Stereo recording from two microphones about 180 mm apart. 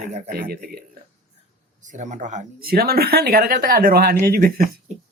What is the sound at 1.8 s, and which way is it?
Speech, 45° right (ahead or behind).